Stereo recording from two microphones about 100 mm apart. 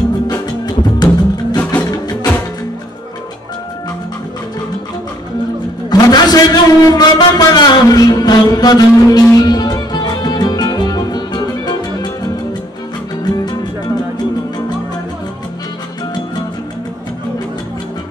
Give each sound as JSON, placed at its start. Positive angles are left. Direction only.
{"t": 0.3, "sound": "music", "side_deg": 40}
{"t": 1.6, "sound": "music", "side_deg": 15}
{"t": 1.9, "sound": "music", "side_deg": 45}
{"t": 5.9, "sound": "a sound", "side_deg": 40}
{"t": 9.3, "sound": "music", "side_deg": 40}